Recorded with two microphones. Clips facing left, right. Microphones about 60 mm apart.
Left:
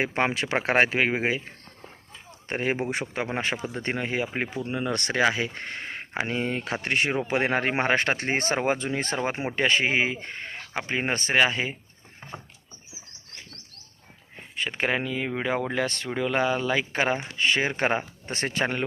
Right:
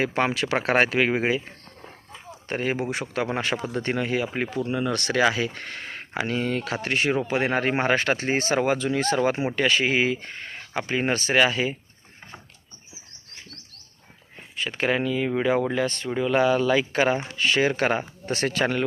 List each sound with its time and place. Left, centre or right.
0.0 s speech: left
0.5 s speech: centre
2.5 s speech: left
3.3 s speech: centre
4.4 s speech: right
4.7 s speech: left
14.6 s speech: left
15.7 s speech: left
16.4 s speech: left